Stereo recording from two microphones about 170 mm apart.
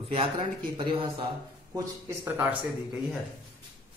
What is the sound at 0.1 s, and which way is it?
Speech, 30° right (ahead or behind).